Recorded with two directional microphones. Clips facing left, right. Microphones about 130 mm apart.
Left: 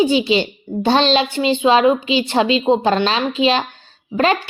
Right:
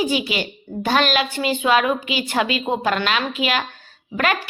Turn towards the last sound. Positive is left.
turn(degrees=25)  # may be behind; listen again after turning